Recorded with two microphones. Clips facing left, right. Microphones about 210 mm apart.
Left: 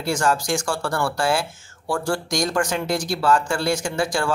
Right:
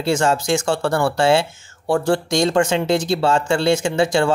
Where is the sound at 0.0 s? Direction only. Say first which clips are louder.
Right 4 dB; 25° right (ahead or behind).